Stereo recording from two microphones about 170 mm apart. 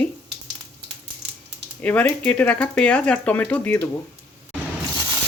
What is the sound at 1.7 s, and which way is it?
Speech, 10° left (ahead or behind).